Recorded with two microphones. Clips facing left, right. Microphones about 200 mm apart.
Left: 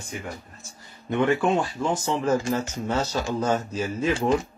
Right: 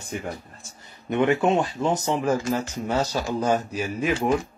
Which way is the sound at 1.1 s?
20° right (ahead or behind).